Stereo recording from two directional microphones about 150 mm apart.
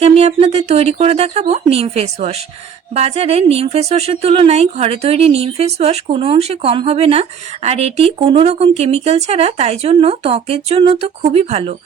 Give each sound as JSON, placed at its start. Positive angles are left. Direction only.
{"t": 0.0, "sound": "speech", "side_deg": -45}